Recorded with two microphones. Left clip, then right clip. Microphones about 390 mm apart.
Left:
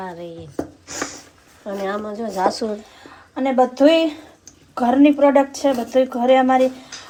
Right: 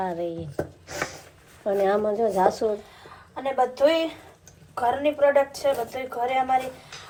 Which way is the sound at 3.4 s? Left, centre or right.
Left.